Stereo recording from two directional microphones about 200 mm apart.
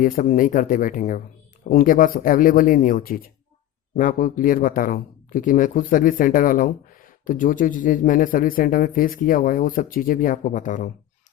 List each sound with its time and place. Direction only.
0.0 s a man's voice: 45° left (ahead or behind)